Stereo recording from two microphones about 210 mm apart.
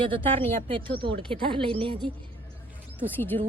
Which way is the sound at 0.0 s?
25° right (ahead or behind).